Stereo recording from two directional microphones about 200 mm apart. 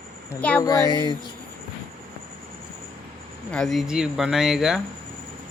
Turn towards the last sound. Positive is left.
turn(degrees=0)  # may be behind; listen again after turning